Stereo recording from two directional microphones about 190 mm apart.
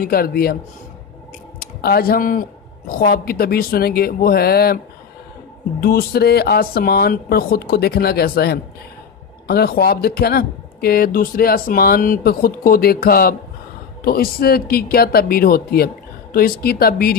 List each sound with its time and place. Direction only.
0.0 s speech: 50° left (ahead or behind)
1.6 s speech: 55° left (ahead or behind)
5.8 s speech: 55° left (ahead or behind)